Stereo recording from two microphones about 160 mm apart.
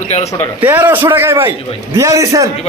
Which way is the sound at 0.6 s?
15° right (ahead or behind).